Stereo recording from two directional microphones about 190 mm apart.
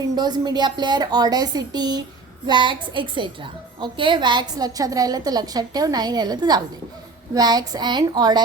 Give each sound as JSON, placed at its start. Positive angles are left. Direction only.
{"t": 0.2, "sound": "a woman's voice", "side_deg": -20}